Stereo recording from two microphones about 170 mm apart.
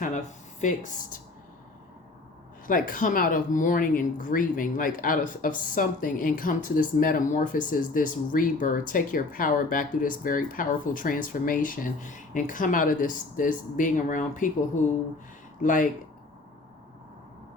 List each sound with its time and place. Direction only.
0.6 s speech: 45° left (ahead or behind)
2.6 s speech: 55° left (ahead or behind)
15.6 s speech: 50° left (ahead or behind)